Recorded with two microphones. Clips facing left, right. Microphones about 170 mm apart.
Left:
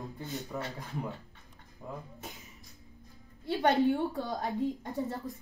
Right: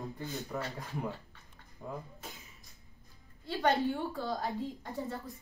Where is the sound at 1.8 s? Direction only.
5° right (ahead or behind).